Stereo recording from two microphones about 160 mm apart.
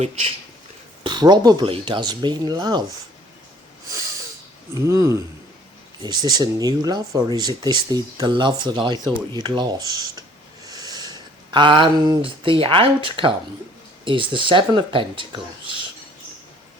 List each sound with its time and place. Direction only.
0.0 s speech: 40° right (ahead or behind)
1.0 s speech: 25° right (ahead or behind)
4.7 s speech: 20° right (ahead or behind)